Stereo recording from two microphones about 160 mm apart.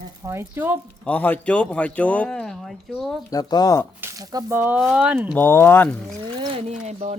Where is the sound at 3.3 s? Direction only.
25° left (ahead or behind).